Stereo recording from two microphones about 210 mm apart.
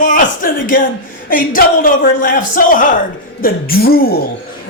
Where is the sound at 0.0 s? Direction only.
40° left (ahead or behind).